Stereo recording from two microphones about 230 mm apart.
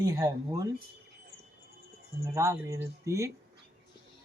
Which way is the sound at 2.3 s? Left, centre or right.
Centre.